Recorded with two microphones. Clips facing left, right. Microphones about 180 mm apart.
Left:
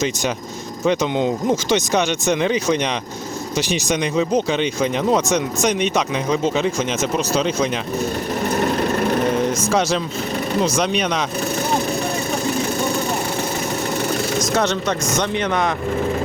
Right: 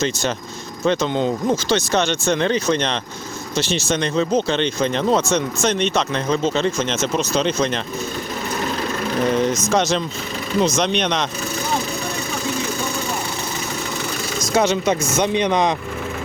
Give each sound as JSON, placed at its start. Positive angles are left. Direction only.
{"t": 0.9, "sound": "speech", "side_deg": 15}
{"t": 8.5, "sound": "lawn mower", "side_deg": 55}
{"t": 9.5, "sound": "speech", "side_deg": 10}
{"t": 14.5, "sound": "speech", "side_deg": -5}